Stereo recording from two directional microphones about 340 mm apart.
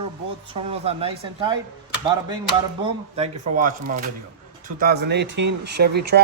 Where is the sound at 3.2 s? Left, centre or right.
Right.